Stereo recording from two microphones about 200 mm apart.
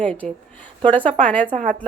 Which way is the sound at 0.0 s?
5° left (ahead or behind).